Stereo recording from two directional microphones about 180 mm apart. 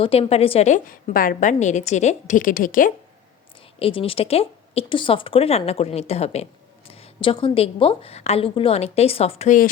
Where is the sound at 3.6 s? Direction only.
30° left (ahead or behind).